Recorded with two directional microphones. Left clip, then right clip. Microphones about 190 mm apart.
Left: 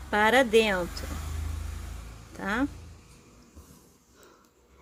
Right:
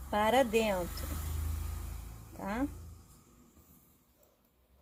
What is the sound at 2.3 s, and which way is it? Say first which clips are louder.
Speech: left 7 dB; 25° left (ahead or behind).